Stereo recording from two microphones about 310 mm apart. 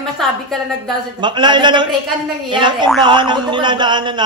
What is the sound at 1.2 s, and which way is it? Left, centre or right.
A man's voice, centre.